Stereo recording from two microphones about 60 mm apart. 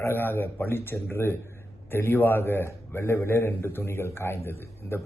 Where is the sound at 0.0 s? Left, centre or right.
Left.